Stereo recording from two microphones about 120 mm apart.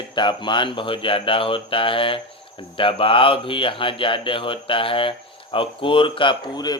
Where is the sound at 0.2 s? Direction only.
40° left (ahead or behind).